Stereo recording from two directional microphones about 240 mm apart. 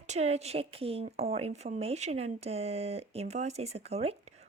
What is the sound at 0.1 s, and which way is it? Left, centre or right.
A woman's voice, right.